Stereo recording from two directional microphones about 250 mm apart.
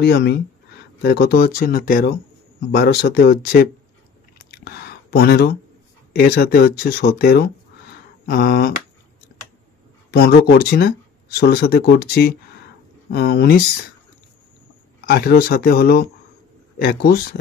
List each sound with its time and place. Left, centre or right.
0.0 s speech: left
4.5 s a sound: left
6.1 s speech: left
10.1 s speech: left
15.0 s speech: left